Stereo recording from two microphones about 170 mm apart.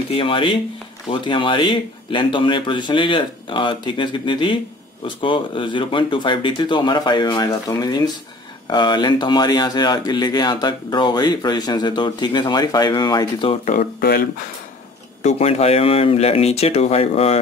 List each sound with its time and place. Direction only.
0.1 s speech: 30° left (ahead or behind)
13.7 s speech: 60° left (ahead or behind)
15.2 s speech: 40° left (ahead or behind)